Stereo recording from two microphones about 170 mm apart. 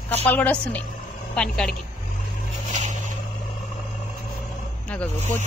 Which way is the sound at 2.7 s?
45° right (ahead or behind).